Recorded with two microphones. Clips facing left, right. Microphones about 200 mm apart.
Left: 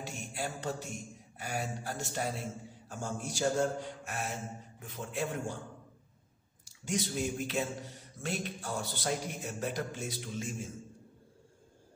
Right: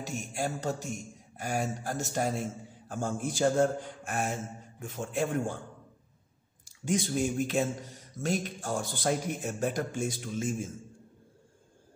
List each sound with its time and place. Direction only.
0.0 s speech: 45° right (ahead or behind)
6.6 s speech: 50° right (ahead or behind)